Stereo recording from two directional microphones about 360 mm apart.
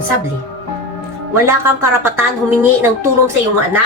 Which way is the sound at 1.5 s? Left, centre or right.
Centre.